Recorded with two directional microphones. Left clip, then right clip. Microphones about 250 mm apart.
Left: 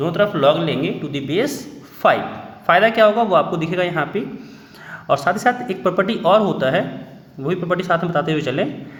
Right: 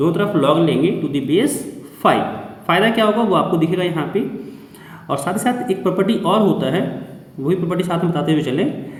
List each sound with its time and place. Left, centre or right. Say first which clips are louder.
0.0 s speech: left 1 dB; left